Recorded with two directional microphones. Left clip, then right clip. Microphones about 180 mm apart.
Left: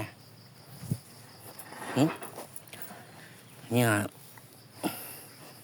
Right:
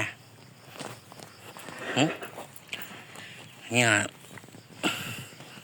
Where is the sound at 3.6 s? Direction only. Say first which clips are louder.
Right 4 dB; 40° left (ahead or behind).